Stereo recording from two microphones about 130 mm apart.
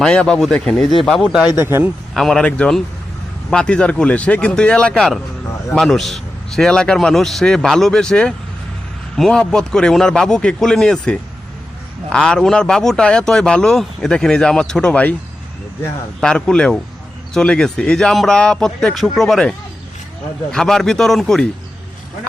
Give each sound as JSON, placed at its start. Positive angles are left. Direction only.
{"t": 0.0, "sound": "speech", "side_deg": 5}
{"t": 1.5, "sound": "a man's voice", "side_deg": -20}
{"t": 2.1, "sound": "speech", "side_deg": 5}
{"t": 16.2, "sound": "speech", "side_deg": 5}